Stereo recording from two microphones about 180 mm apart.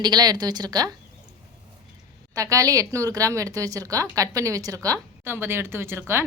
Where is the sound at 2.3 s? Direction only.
20° right (ahead or behind).